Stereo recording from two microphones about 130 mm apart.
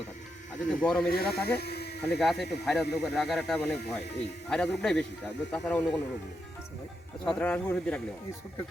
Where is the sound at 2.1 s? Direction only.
Centre (ahead or behind).